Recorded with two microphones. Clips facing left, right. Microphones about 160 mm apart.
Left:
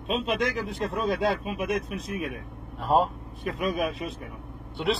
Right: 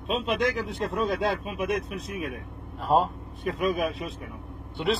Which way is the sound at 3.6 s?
45° right (ahead or behind).